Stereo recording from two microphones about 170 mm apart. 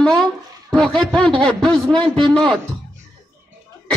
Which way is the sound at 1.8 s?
25° right (ahead or behind).